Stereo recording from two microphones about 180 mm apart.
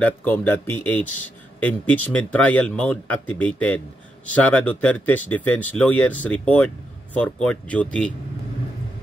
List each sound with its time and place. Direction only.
0.0 s speech: 10° left (ahead or behind)